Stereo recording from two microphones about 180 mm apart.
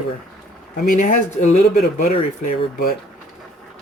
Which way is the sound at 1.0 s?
40° left (ahead or behind).